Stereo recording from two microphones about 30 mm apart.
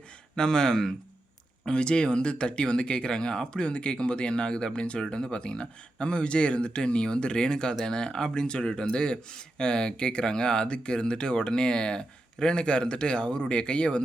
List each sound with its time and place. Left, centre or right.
0.3 s speech: left
1.6 s speech: left